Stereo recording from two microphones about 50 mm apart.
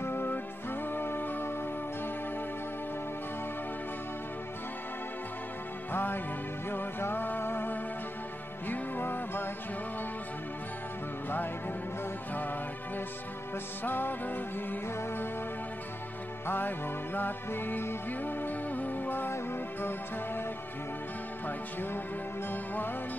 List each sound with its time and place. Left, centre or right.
0.0 s music: left
5.9 s music: left
11.2 s music: left
16.4 s music: left
22.5 s music: left